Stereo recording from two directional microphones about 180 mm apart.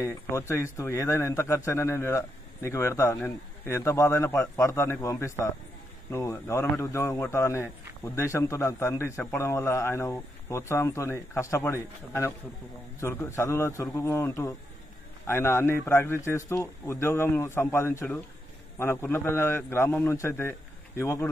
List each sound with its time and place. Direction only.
0.0 s a man's voice: 15° left (ahead or behind)